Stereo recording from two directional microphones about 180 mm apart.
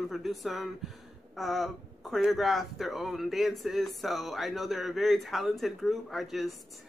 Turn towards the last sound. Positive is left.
turn(degrees=0)  # may be behind; listen again after turning